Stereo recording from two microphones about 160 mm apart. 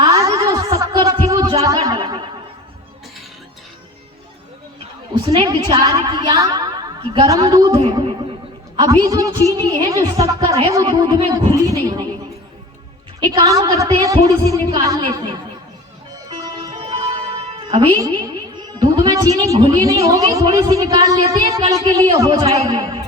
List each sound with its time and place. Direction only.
0.0 s a sound: 25° right (ahead or behind)
5.3 s a woman's voice: 25° right (ahead or behind)
13.1 s a woman's voice: 30° right (ahead or behind)
16.4 s music: 25° right (ahead or behind)
18.8 s a woman's voice: 25° right (ahead or behind)
19.8 s a woman's voice: 20° right (ahead or behind)